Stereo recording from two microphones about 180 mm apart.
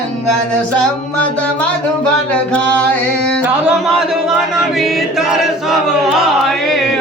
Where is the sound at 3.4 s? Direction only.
5° right (ahead or behind).